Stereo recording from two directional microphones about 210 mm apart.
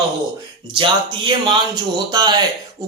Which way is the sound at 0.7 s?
20° right (ahead or behind).